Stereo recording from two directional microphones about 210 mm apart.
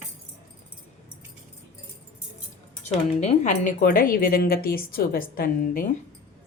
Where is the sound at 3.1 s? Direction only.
35° left (ahead or behind).